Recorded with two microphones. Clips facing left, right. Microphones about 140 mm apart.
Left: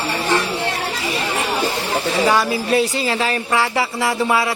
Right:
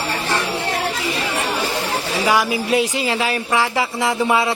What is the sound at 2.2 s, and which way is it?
Speech, 10° right (ahead or behind).